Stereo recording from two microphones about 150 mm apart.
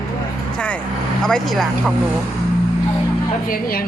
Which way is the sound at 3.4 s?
75° left (ahead or behind).